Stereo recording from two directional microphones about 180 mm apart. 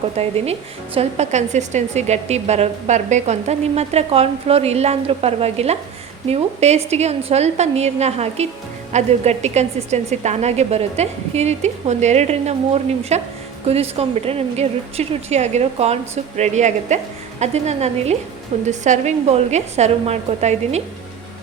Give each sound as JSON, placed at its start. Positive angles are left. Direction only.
{"t": 0.2, "sound": "a woman's voice", "side_deg": -35}